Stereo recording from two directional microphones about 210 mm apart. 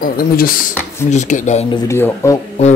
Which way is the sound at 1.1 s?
35° left (ahead or behind).